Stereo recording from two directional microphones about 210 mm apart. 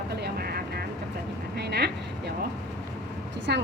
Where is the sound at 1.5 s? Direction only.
50° right (ahead or behind).